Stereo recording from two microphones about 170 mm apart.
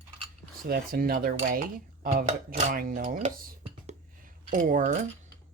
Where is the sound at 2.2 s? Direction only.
55° right (ahead or behind).